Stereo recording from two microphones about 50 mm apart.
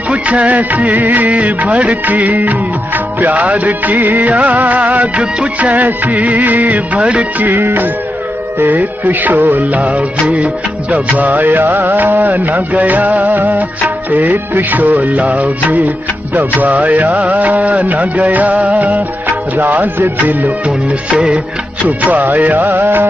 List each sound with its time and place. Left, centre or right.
0.1 s music of bollywood: right
8.5 s music of bollywood: right
20.2 s music of bollywood: right
21.8 s music of bollywood: right